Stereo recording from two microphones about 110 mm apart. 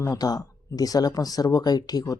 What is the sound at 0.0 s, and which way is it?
Speech, 30° left (ahead or behind).